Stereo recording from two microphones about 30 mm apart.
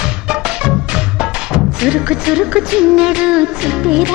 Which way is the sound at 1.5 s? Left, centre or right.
Right.